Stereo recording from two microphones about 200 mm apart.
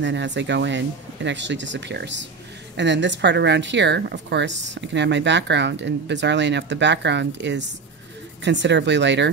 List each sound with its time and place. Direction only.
0.0 s speech: 65° right (ahead or behind)